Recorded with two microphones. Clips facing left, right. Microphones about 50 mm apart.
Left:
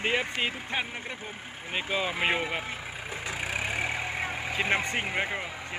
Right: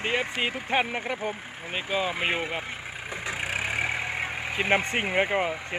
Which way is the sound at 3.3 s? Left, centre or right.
Right.